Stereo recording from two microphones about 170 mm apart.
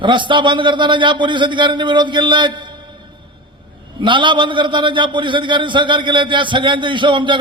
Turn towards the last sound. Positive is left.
turn(degrees=-30)  # may be behind; listen again after turning